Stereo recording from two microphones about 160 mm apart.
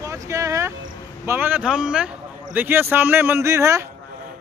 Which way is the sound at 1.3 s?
10° right (ahead or behind).